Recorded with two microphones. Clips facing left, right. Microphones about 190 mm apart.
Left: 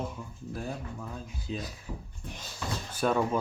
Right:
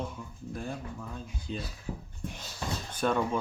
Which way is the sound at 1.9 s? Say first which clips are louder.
Right 6 dB; 40° right (ahead or behind).